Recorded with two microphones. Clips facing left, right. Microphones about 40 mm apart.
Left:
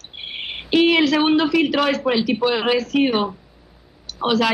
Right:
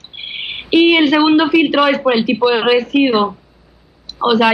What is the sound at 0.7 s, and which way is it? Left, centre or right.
Speech, right.